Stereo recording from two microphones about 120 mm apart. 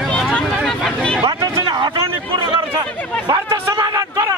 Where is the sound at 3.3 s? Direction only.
30° right (ahead or behind).